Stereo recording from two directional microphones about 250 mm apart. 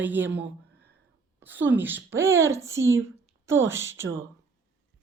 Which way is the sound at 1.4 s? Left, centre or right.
Right.